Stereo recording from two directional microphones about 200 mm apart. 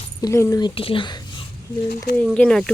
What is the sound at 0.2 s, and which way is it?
Speech, 15° left (ahead or behind).